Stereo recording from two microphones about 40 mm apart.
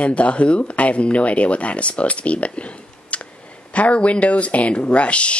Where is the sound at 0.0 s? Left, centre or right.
Left.